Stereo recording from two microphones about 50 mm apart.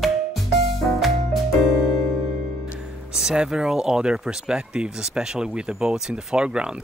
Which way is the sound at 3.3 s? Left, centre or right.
Centre.